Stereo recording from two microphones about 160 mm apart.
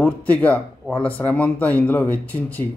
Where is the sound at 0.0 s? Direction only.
10° left (ahead or behind).